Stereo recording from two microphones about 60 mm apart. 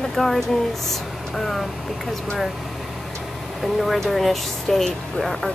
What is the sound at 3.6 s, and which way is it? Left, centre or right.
Speech, centre.